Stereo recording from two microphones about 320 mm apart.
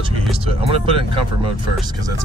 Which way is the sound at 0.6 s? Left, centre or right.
Centre.